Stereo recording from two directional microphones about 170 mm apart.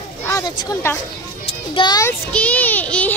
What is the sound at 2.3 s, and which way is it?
Speech, 10° left (ahead or behind).